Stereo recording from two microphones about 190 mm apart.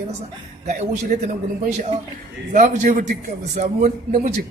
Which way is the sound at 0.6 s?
40° right (ahead or behind).